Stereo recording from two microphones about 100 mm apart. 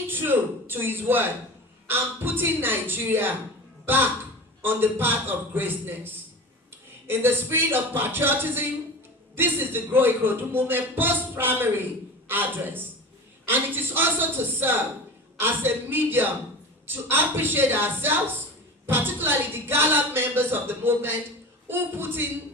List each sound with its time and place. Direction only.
0.1 s speech: 20° right (ahead or behind)
7.1 s speech: 20° right (ahead or behind)